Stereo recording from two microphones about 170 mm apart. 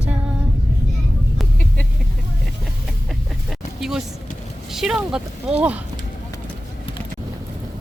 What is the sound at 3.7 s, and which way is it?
Vehicle, centre (ahead or behind).